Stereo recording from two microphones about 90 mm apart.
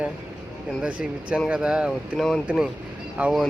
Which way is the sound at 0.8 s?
15° right (ahead or behind).